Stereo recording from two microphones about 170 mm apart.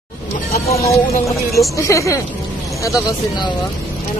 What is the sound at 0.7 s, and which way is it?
Speech, 20° left (ahead or behind).